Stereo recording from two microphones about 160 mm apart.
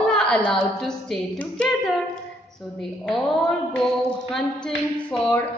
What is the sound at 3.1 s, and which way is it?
Speech, 5° left (ahead or behind).